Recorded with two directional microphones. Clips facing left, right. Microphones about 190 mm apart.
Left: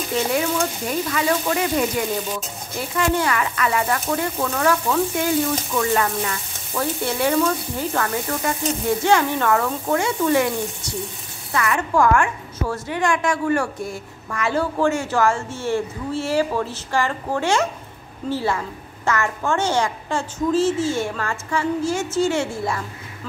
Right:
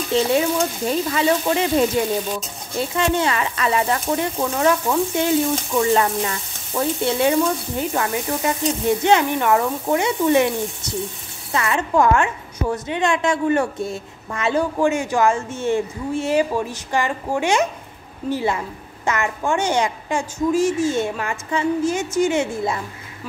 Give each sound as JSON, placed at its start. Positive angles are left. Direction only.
{"t": 0.1, "sound": "a woman's voice", "side_deg": -25}
{"t": 11.5, "sound": "a woman's voice", "side_deg": -25}